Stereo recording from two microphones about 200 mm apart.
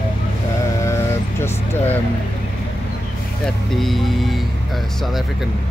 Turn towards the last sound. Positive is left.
turn(degrees=0)  # may be behind; listen again after turning